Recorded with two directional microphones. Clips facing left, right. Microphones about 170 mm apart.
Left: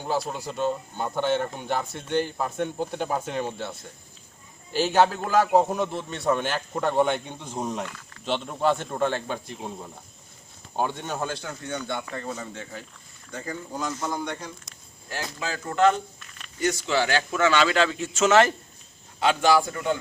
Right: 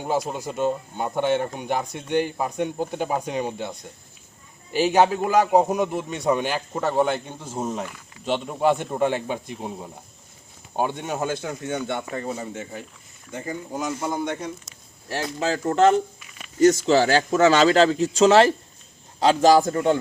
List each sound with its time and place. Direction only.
0.1 s a man's voice: 20° right (ahead or behind)
0.5 s a man's voice: 10° right (ahead or behind)
4.7 s a man's voice: centre (ahead or behind)
15.1 s a man's voice: 30° right (ahead or behind)